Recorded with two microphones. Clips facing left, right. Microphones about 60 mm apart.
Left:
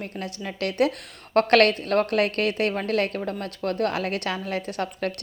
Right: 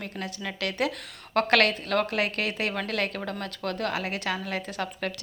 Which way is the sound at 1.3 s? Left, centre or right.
Left.